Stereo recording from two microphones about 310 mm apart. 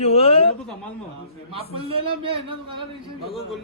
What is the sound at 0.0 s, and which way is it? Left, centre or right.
Speech, centre.